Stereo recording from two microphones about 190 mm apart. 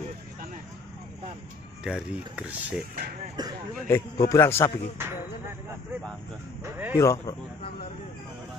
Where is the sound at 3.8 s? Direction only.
15° left (ahead or behind).